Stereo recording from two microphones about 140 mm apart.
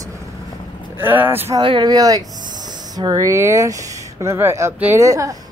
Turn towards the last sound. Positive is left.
turn(degrees=-25)  # may be behind; listen again after turning